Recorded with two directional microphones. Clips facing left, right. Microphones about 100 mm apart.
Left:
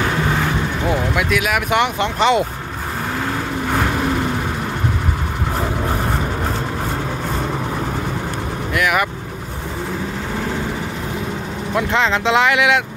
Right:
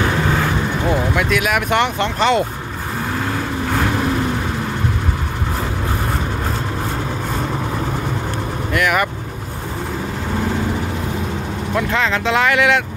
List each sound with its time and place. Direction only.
0.8 s speech: 5° left (ahead or behind)
8.7 s speech: 5° left (ahead or behind)
11.9 s speech: 25° left (ahead or behind)